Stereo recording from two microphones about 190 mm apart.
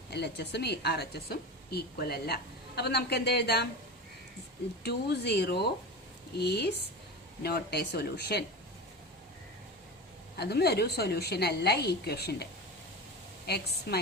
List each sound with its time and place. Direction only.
0.1 s speech: 60° left (ahead or behind)
4.8 s speech: 60° left (ahead or behind)
10.3 s speech: 60° left (ahead or behind)
13.5 s speech: 60° left (ahead or behind)